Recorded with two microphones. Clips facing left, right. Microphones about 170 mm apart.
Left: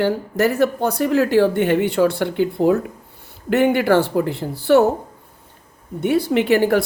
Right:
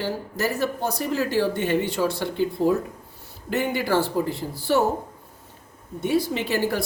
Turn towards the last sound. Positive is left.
turn(degrees=60)  # may be behind; listen again after turning